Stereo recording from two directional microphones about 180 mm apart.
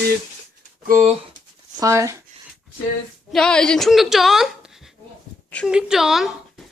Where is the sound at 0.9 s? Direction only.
45° right (ahead or behind).